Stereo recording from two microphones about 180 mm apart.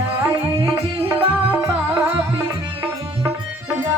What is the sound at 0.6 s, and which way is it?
Music, 15° right (ahead or behind).